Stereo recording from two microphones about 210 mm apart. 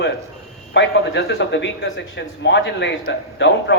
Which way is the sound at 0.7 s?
55° left (ahead or behind).